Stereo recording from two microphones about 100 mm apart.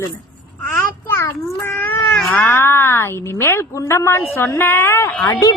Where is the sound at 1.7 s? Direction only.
20° left (ahead or behind).